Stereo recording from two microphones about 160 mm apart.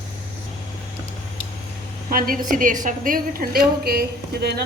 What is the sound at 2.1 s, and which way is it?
A woman's voice, 60° right (ahead or behind).